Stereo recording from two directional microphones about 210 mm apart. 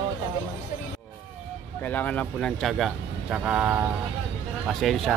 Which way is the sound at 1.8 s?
5° left (ahead or behind).